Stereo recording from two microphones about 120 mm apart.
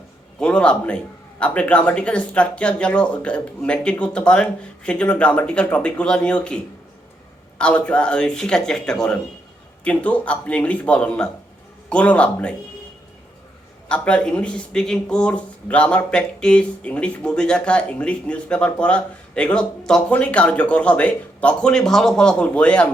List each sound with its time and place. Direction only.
0.3 s speech: 10° left (ahead or behind)
7.6 s speech: 10° left (ahead or behind)
13.8 s speech: 10° left (ahead or behind)